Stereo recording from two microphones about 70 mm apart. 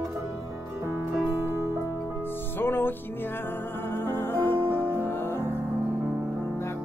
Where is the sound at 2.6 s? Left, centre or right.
Left.